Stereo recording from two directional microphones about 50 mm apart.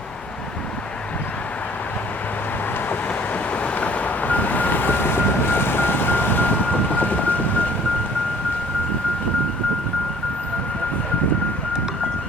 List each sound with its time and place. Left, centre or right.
3.6 s vehicle: left